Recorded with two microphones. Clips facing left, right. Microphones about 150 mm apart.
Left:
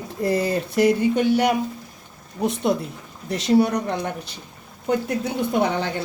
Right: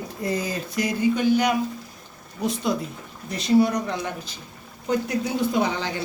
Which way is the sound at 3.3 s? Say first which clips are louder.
Left 1 dB; 80° left.